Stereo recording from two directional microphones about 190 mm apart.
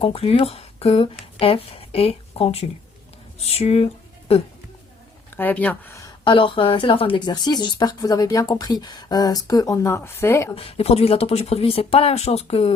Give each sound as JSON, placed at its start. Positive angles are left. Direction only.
{"t": 0.0, "sound": "speech", "side_deg": 30}
{"t": 5.4, "sound": "speech", "side_deg": 10}
{"t": 6.2, "sound": "speech", "side_deg": 25}
{"t": 10.5, "sound": "speech", "side_deg": 30}